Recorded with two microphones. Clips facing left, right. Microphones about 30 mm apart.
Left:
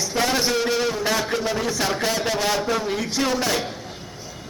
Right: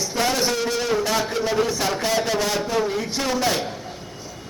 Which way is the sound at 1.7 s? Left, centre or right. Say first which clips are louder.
Even; centre.